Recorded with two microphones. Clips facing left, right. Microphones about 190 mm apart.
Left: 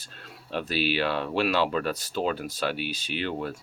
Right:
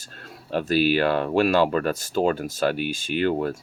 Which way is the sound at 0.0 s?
45° right (ahead or behind).